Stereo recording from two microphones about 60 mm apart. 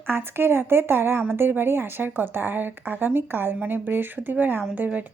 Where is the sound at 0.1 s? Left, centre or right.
Right.